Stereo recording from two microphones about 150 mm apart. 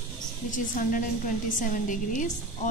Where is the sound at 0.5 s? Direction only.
60° left (ahead or behind).